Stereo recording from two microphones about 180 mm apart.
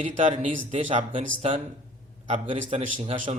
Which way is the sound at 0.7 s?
40° right (ahead or behind).